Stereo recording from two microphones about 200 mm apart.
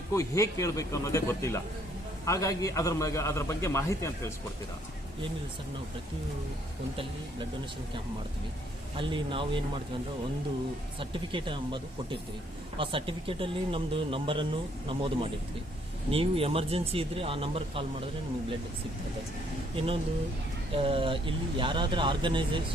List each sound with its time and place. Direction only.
0.1 s a man's voice: 15° left (ahead or behind)
6.9 s speech: 25° right (ahead or behind)
9.0 s speech: 25° right (ahead or behind)
11.0 s speech: 25° right (ahead or behind)
19.7 s speech: 25° right (ahead or behind)